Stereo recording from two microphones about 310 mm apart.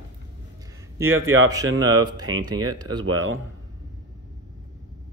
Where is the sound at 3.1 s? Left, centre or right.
Right.